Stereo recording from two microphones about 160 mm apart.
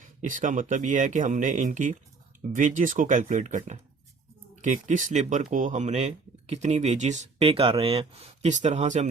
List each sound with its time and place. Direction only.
0.2 s speech: 55° right (ahead or behind)